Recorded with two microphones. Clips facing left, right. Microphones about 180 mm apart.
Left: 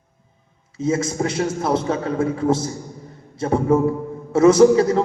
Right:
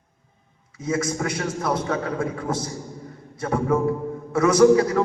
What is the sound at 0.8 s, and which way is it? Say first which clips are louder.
A man's voice: left 4 dB; 25° left (ahead or behind).